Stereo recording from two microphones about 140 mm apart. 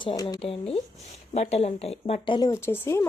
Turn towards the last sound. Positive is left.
turn(degrees=15)  # may be behind; listen again after turning